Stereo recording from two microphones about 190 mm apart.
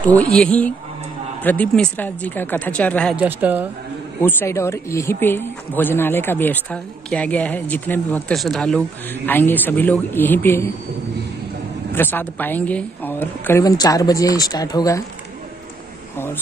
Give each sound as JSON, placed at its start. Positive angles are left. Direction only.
{"t": 0.0, "sound": "speech", "side_deg": 5}
{"t": 3.2, "sound": "speech", "side_deg": -10}
{"t": 4.2, "sound": "speech", "side_deg": 10}
{"t": 11.9, "sound": "speech", "side_deg": 10}